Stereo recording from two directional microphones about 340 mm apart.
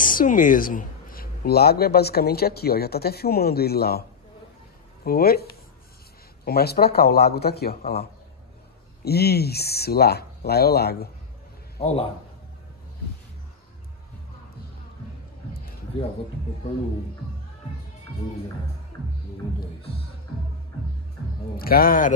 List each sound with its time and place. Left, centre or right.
0.0 s speech: left
5.0 s speech: left
11.8 s a man's voice: centre
21.5 s speech: left